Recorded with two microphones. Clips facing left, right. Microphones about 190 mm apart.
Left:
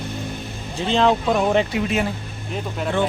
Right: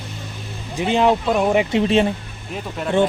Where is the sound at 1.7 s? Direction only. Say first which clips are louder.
Right 5 dB; 30° right (ahead or behind).